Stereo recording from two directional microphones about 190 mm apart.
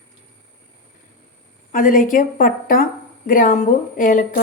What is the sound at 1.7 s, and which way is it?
Speech, 45° left (ahead or behind).